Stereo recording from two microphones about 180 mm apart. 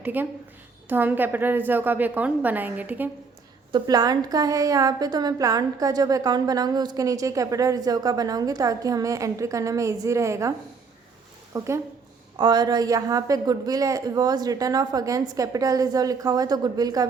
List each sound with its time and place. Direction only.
0.0 s a woman's voice: 10° right (ahead or behind)
3.7 s a woman's voice: 25° right (ahead or behind)
11.5 s a woman's voice: 15° right (ahead or behind)